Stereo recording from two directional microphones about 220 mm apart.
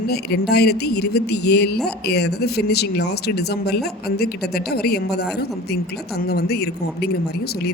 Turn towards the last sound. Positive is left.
turn(degrees=45)  # may be behind; listen again after turning